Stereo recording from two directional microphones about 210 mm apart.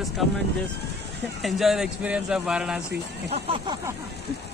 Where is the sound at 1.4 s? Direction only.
Centre (ahead or behind).